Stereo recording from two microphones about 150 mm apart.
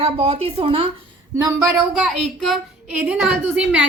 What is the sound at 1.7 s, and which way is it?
A woman's voice, centre (ahead or behind).